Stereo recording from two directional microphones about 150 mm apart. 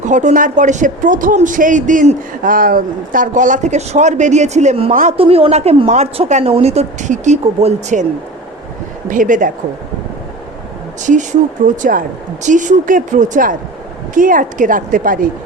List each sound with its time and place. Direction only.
0.0 s speech: 55° right (ahead or behind)
5.1 s a woman's voice: 40° right (ahead or behind)
9.0 s speech: 60° right (ahead or behind)
11.0 s speech: 55° right (ahead or behind)